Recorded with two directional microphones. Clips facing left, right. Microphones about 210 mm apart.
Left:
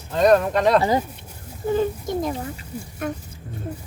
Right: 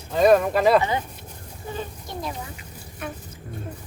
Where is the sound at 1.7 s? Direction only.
50° left (ahead or behind).